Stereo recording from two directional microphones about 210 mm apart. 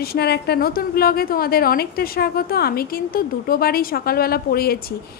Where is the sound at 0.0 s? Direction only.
50° left (ahead or behind).